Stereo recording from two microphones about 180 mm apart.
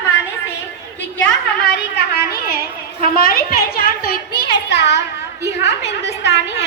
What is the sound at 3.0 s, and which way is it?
A woman's voice, 55° left (ahead or behind).